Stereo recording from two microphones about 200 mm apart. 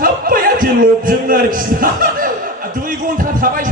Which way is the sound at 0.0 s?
45° right (ahead or behind).